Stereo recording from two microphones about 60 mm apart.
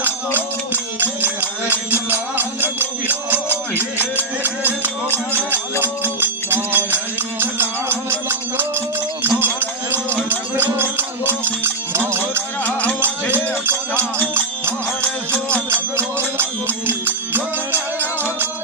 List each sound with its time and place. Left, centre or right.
0.3 s music: right
9.4 s a sound: right
13.3 s music: right
15.7 s music: right